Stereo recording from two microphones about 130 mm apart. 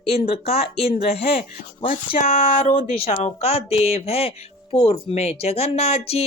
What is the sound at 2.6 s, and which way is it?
Speech, 65° left (ahead or behind).